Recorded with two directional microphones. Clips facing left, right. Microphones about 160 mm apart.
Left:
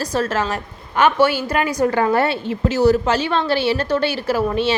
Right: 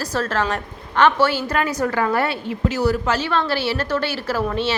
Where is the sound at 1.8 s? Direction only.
25° left (ahead or behind).